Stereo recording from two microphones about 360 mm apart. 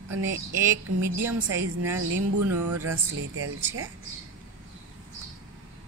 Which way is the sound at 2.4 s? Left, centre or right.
Right.